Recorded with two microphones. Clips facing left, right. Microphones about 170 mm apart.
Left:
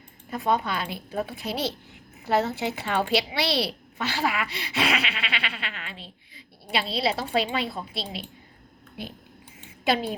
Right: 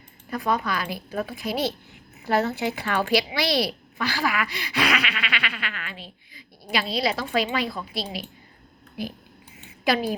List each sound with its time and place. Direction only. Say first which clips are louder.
0.3 s speech: even; 25° left (ahead or behind)
9.8 s speech: right 2 dB; 25° left (ahead or behind)